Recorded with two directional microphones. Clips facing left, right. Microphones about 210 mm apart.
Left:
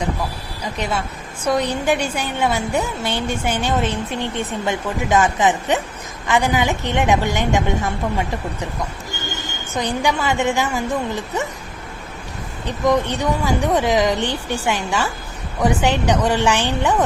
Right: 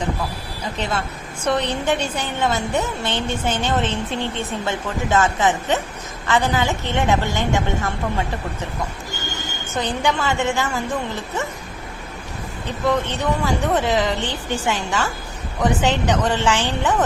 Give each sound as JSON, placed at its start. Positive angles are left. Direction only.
{"t": 0.6, "sound": "a woman's voice", "side_deg": 10}
{"t": 9.7, "sound": "a woman's voice", "side_deg": 10}
{"t": 12.8, "sound": "a woman's voice", "side_deg": 15}